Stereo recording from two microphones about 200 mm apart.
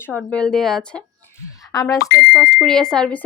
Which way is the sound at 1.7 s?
15° left (ahead or behind).